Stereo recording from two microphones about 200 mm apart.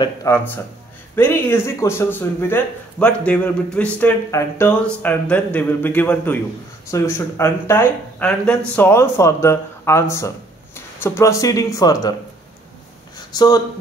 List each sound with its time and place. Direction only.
0.0 s speech: 15° left (ahead or behind)
13.3 s speech: 20° left (ahead or behind)